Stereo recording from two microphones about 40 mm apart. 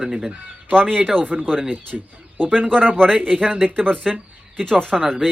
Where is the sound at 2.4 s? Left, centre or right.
Right.